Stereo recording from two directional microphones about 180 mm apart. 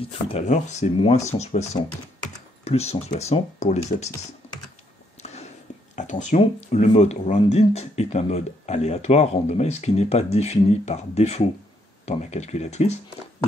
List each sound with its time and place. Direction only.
0.0 s speech: 35° left (ahead or behind)
5.2 s a sound: 35° left (ahead or behind)
5.9 s speech: 45° left (ahead or behind)